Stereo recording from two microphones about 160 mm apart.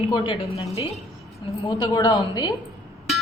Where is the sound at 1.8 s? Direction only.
25° left (ahead or behind).